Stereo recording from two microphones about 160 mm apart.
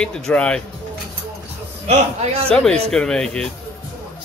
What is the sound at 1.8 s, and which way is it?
Speech, 40° right (ahead or behind).